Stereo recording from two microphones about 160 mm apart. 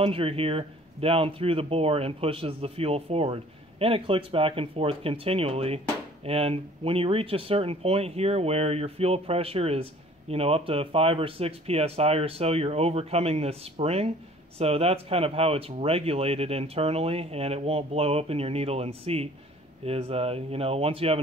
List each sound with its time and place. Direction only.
0.0 s speech: 35° right (ahead or behind)